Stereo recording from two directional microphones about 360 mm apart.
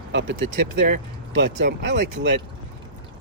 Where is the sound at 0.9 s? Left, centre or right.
Right.